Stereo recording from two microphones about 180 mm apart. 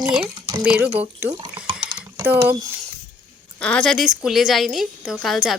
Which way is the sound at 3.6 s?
5° left (ahead or behind).